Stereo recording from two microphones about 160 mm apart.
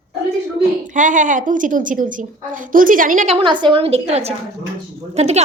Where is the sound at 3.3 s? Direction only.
35° right (ahead or behind).